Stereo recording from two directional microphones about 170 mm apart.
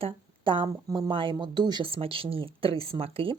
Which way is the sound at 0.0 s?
30° right (ahead or behind).